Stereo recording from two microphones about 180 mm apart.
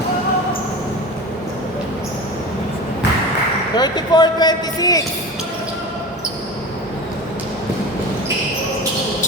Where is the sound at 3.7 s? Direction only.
25° left (ahead or behind).